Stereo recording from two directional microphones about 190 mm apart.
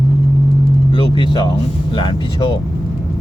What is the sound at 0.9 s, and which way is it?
Speech, 25° left (ahead or behind).